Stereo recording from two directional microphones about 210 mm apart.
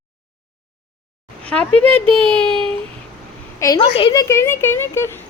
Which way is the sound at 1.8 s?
25° right (ahead or behind).